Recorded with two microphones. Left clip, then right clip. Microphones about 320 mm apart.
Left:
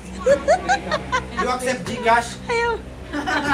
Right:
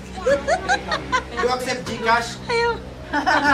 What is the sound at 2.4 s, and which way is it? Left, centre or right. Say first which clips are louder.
Speech: right 4 dB; centre.